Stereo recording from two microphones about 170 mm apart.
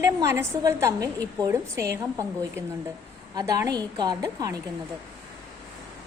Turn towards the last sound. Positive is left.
turn(degrees=-20)  # may be behind; listen again after turning